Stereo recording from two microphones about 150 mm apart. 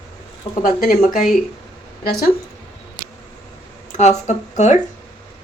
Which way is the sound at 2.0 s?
90° left.